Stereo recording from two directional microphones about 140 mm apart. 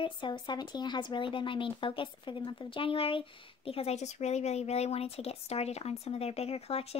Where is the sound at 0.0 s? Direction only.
35° left (ahead or behind).